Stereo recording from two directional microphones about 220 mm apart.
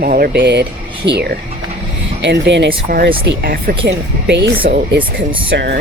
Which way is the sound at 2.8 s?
40° right (ahead or behind).